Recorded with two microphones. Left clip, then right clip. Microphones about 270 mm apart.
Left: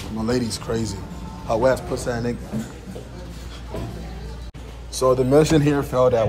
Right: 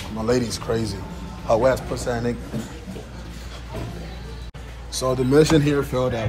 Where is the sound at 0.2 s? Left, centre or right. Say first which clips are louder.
Right 2 dB; centre.